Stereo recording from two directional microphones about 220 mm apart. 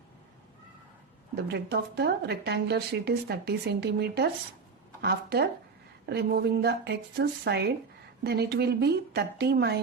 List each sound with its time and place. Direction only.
1.5 s a woman's voice: 50° right (ahead or behind)